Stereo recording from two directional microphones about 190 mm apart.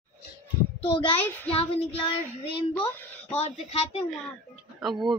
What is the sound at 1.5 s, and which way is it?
Child singing, 30° left (ahead or behind).